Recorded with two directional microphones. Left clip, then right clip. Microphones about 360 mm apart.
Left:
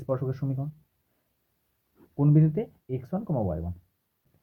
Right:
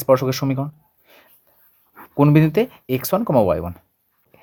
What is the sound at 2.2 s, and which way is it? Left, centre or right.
Speech, right.